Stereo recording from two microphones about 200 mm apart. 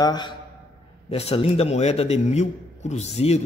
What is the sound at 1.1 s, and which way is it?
A man's voice, 30° left (ahead or behind).